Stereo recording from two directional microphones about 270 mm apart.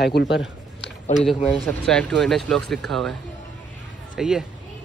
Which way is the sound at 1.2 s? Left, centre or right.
Centre.